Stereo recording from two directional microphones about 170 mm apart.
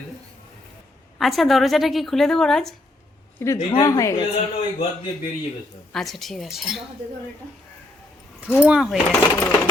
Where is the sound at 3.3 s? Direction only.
15° left (ahead or behind).